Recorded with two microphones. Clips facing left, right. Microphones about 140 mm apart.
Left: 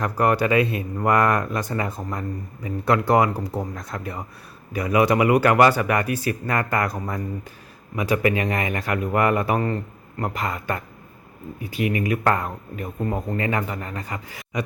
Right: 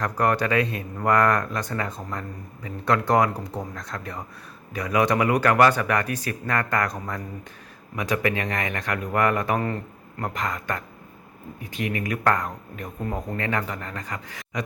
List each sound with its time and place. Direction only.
0.0 s speech: 5° left (ahead or behind)